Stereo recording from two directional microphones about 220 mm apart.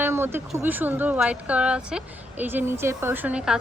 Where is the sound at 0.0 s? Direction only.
10° right (ahead or behind).